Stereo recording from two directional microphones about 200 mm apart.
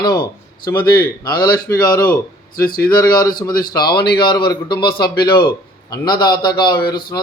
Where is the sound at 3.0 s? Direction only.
20° left (ahead or behind).